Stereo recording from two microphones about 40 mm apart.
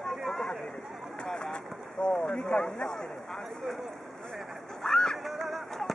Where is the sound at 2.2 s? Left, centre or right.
Centre.